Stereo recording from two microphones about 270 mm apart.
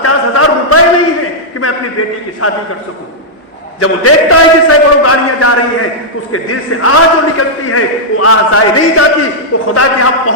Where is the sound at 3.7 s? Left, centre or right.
Left.